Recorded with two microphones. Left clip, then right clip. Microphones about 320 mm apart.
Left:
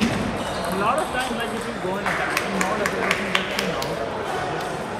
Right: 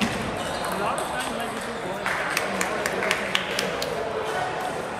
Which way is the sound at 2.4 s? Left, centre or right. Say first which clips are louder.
Left 3 dB; left.